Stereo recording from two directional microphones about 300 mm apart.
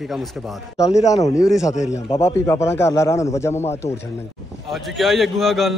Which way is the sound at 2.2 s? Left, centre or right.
Centre.